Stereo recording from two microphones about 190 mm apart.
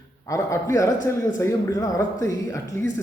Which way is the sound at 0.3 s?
15° left (ahead or behind).